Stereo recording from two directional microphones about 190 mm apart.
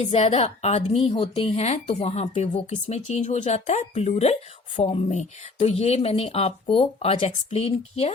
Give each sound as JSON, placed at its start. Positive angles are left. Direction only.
{"t": 0.0, "sound": "a woman's voice", "side_deg": 35}